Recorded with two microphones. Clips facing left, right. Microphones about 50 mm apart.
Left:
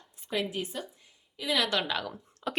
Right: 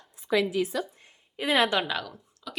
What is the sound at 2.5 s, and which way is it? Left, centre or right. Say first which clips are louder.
Speech: left 5 dB; left.